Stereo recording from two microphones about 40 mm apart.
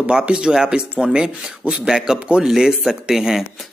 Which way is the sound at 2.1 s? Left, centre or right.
Right.